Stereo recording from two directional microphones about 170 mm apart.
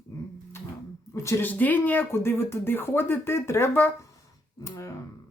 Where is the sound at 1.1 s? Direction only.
15° left (ahead or behind).